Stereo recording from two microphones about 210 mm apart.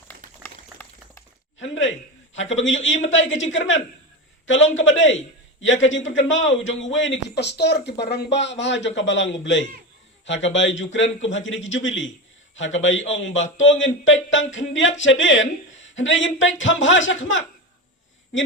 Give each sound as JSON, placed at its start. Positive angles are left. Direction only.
{"t": 1.6, "sound": "a sound", "side_deg": 60}
{"t": 2.3, "sound": "speech", "side_deg": 65}
{"t": 4.8, "sound": "a man's voice", "side_deg": 65}